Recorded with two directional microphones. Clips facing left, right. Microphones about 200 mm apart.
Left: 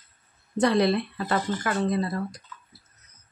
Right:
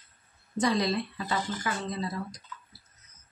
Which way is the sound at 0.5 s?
60° left (ahead or behind).